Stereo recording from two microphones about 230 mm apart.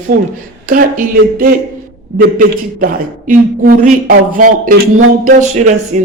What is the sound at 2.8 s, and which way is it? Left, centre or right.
A man's voice, right.